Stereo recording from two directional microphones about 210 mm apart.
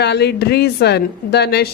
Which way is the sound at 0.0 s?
50° left (ahead or behind).